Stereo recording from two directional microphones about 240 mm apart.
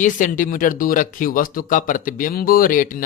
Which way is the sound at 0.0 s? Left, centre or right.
Left.